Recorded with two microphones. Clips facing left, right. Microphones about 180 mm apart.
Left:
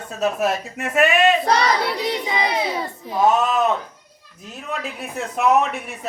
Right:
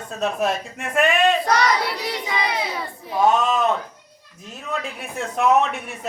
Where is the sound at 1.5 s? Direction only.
30° left (ahead or behind).